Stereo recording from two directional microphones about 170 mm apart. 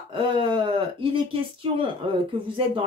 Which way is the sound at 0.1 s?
30° right (ahead or behind).